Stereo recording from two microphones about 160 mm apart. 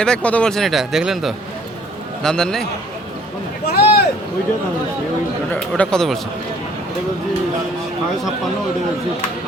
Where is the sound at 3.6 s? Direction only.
80° left.